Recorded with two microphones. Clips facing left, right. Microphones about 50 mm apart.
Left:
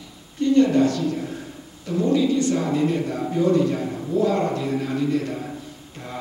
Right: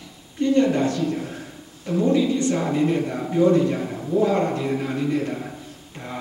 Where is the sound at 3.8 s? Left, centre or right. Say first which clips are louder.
Right 1 dB; centre.